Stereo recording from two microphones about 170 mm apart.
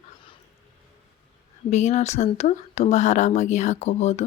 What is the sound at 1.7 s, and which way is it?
Speech, 40° left (ahead or behind).